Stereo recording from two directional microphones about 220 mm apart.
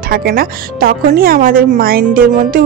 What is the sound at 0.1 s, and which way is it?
Speech, 40° right (ahead or behind).